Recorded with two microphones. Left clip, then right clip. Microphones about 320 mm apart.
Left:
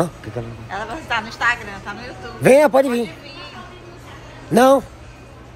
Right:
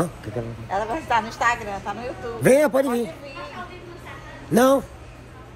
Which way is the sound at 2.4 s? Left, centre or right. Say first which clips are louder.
Left 5 dB; centre.